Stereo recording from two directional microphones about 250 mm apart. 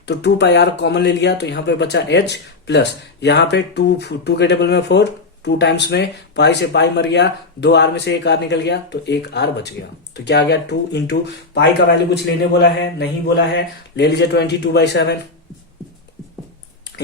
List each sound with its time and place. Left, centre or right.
0.0 s speech: left